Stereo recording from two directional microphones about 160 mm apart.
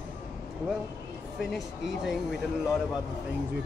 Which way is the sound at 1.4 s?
Centre (ahead or behind).